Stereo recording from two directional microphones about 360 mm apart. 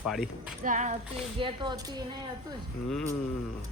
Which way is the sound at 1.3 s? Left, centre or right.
Centre.